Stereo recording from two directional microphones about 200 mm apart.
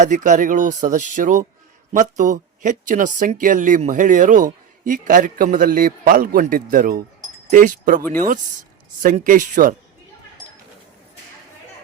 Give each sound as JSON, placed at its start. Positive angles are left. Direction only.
{"t": 0.0, "sound": "speech", "side_deg": -40}